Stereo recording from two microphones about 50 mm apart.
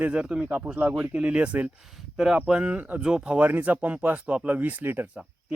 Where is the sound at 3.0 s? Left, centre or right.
Centre.